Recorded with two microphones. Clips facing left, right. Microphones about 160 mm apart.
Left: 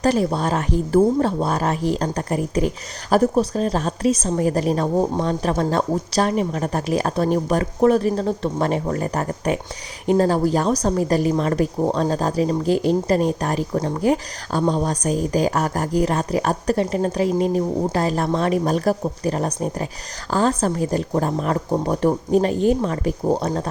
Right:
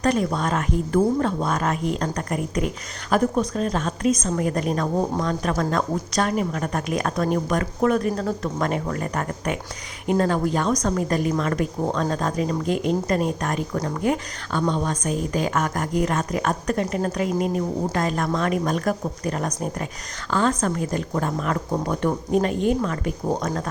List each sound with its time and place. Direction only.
0.0 s speech: 35° left (ahead or behind)